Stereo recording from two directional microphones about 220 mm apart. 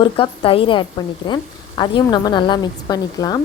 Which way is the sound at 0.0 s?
25° left (ahead or behind).